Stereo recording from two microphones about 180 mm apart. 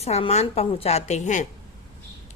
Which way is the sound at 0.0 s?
35° left (ahead or behind).